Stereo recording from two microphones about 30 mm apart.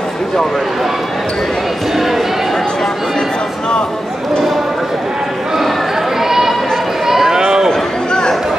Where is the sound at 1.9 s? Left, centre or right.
Centre.